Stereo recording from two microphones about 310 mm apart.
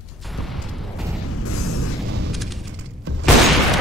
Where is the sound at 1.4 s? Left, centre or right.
Left.